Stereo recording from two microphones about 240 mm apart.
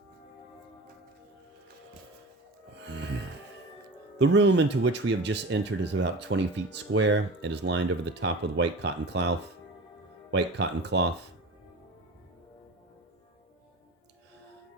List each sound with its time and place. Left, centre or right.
2.7 s music: right
4.2 s speech: right
10.3 s speech: right